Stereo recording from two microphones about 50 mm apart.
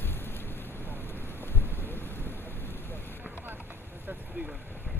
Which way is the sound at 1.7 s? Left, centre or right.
Left.